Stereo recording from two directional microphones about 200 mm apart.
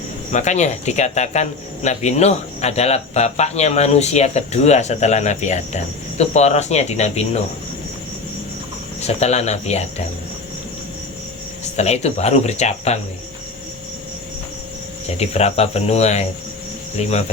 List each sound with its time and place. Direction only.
0.3 s speech: 35° left (ahead or behind)
9.0 s speech: 35° left (ahead or behind)
11.8 s speech: 35° left (ahead or behind)
15.2 s speech: 30° left (ahead or behind)